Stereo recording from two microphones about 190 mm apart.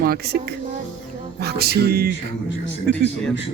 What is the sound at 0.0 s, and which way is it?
Speech, 55° right (ahead or behind).